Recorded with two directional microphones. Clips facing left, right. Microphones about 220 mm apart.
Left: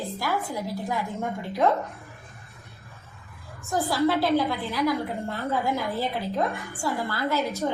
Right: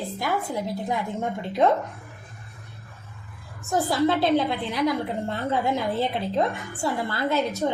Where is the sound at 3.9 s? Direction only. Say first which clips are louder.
Right 1 dB; 20° right (ahead or behind).